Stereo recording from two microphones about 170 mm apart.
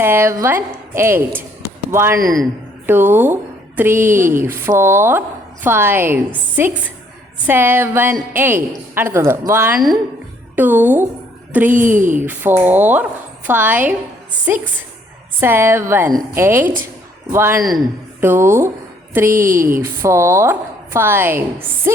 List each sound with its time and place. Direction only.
0.0 s a woman's voice: 15° right (ahead or behind)
11.9 s speech: 50° right (ahead or behind)
12.2 s a woman's voice: 10° right (ahead or behind)
15.4 s a woman's voice: 15° right (ahead or behind)